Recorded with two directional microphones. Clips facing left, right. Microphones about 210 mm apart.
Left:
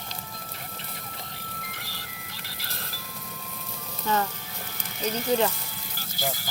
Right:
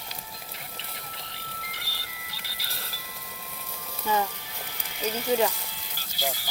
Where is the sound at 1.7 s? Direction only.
50° left (ahead or behind).